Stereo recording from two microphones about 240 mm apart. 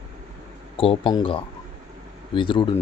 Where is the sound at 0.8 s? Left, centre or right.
Centre.